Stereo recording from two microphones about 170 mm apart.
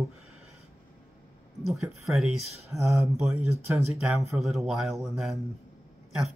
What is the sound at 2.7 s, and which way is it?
Speech, 15° right (ahead or behind).